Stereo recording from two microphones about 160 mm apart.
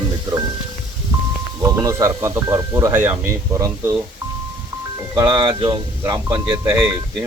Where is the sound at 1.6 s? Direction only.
20° right (ahead or behind).